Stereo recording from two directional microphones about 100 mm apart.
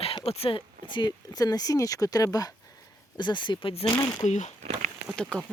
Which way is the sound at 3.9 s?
40° left (ahead or behind).